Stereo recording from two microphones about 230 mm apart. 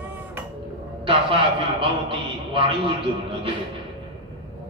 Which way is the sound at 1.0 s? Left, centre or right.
Right.